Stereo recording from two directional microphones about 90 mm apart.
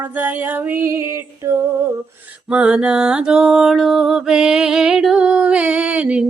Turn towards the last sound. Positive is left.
turn(degrees=-15)  # may be behind; listen again after turning